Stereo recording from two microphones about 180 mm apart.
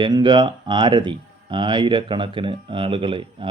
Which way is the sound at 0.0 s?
25° right (ahead or behind).